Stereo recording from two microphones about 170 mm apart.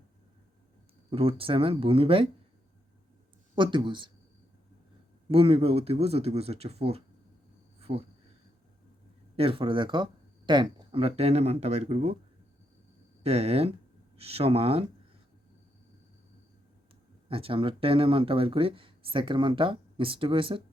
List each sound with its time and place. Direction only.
1.1 s speech: 35° right (ahead or behind)
3.5 s speech: 30° right (ahead or behind)
5.3 s speech: 35° right (ahead or behind)
7.8 s a sound: 35° right (ahead or behind)
9.3 s speech: 35° right (ahead or behind)
13.2 s speech: 40° right (ahead or behind)
17.2 s speech: 35° right (ahead or behind)